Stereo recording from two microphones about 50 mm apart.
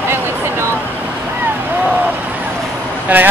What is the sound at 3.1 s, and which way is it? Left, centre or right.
Speech, right.